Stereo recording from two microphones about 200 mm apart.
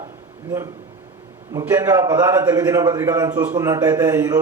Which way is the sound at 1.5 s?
15° right (ahead or behind).